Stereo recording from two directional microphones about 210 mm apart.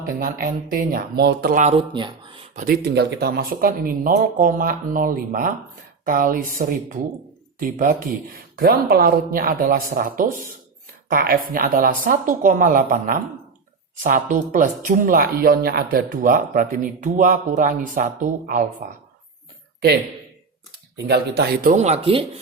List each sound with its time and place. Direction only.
0.0 s speech: 45° right (ahead or behind); by 2.5 s 25° right (ahead or behind)
2.6 s speech: 45° right (ahead or behind)
21.1 s speech: 45° right (ahead or behind); by 22.2 s 30° right (ahead or behind)